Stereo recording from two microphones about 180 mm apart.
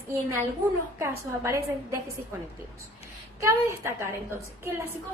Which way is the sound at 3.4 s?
15° right (ahead or behind).